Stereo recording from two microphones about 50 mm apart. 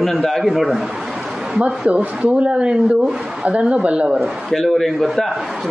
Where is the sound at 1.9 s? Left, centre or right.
Right.